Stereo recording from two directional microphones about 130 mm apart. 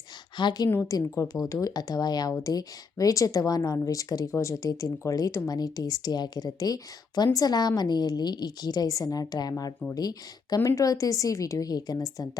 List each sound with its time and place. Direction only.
0.3 s a woman's voice: 35° left (ahead or behind)